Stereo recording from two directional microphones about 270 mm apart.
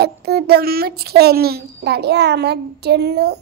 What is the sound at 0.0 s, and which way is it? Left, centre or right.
A child's voice, right.